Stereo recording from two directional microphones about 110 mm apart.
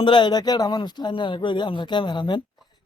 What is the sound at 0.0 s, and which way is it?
Speech, 45° left (ahead or behind).